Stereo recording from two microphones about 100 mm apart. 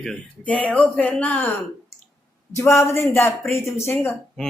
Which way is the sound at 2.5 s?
30° left (ahead or behind).